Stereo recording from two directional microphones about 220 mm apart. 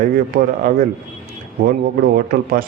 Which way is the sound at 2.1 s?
40° right (ahead or behind).